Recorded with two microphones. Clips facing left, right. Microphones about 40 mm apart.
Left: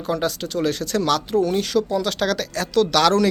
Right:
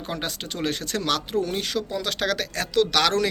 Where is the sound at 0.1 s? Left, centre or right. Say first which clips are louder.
Left 8 dB; right.